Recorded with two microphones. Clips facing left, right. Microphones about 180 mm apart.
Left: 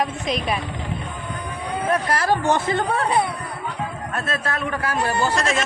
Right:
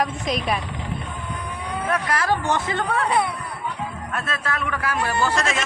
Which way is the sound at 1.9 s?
35° left (ahead or behind).